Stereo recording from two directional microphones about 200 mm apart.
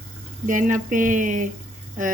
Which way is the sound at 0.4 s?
40° right (ahead or behind).